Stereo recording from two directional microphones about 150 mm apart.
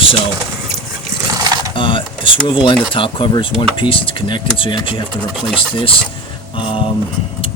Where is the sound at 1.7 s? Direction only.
35° left (ahead or behind).